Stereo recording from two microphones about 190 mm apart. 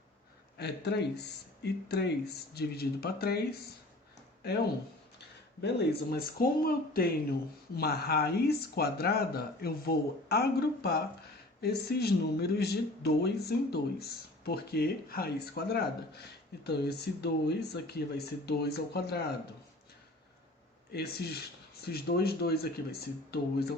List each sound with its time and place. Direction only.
0.5 s speech: 60° left (ahead or behind)
5.6 s speech: 55° left (ahead or behind)
20.9 s speech: 60° left (ahead or behind)